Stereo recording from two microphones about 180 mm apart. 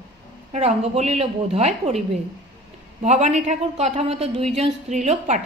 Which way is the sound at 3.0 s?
40° right (ahead or behind).